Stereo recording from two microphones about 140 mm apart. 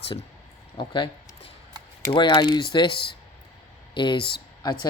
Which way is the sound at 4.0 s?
35° left (ahead or behind).